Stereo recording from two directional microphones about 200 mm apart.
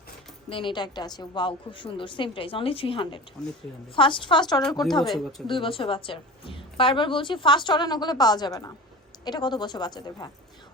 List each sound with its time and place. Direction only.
0.5 s a woman's voice: 25° left (ahead or behind)
3.4 s a woman's voice: 5° left (ahead or behind)
3.9 s a woman's voice: 25° left (ahead or behind)